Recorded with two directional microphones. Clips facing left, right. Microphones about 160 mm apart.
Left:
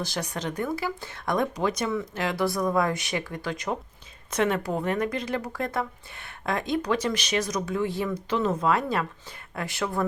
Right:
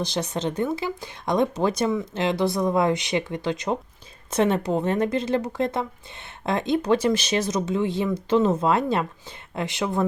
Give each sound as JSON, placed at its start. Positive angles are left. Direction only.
{"t": 0.0, "sound": "speech", "side_deg": -20}
{"t": 1.9, "sound": "speech", "side_deg": -20}